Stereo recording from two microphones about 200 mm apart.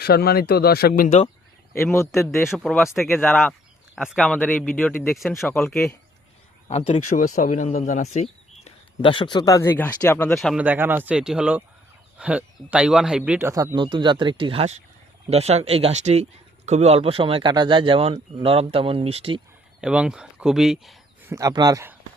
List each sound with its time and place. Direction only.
0.0 s speech: 50° left (ahead or behind)
1.7 s a man's voice: 15° left (ahead or behind)
2.1 s speech: centre (ahead or behind)
6.7 s speech: 30° left (ahead or behind)
7.1 s speech: 40° left (ahead or behind); by 10.3 s 10° left (ahead or behind)
10.3 s speech: centre (ahead or behind)
13.5 s speech: 15° right (ahead or behind)
19.8 s speech: 5° right (ahead or behind)
21.2 s speech: 15° right (ahead or behind)